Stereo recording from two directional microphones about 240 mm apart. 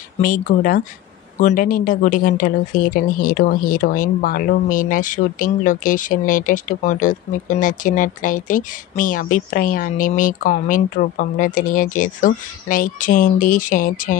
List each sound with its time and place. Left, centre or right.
0.2 s speech: left